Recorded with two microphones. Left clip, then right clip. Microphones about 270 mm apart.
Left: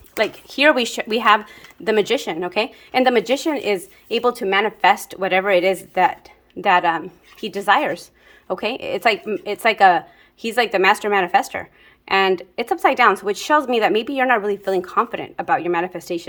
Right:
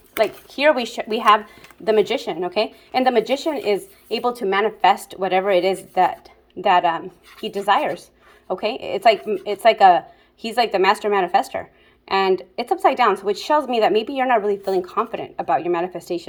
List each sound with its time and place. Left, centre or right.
0.2 s speech: left